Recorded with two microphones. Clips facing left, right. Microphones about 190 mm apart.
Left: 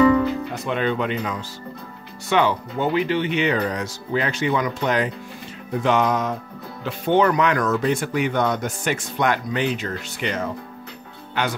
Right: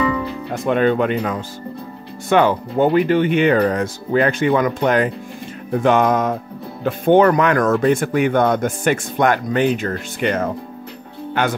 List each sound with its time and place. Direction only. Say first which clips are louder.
0.5 s speech: right 7 dB; 50° right (ahead or behind)